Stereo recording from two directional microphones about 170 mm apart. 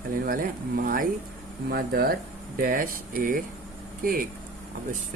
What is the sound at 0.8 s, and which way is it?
Speech, 55° right (ahead or behind).